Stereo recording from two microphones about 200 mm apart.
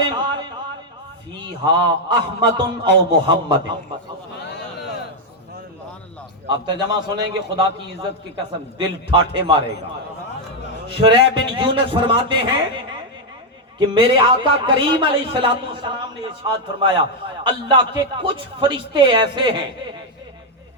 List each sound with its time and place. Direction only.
0.0 s a sound: 20° right (ahead or behind)
1.4 s a man's voice: 20° right (ahead or behind)
6.5 s a man's voice: 20° right (ahead or behind)
8.8 s a man's voice: 25° right (ahead or behind)
10.8 s a man's voice: 25° right (ahead or behind)
13.7 s a man's voice: 25° right (ahead or behind)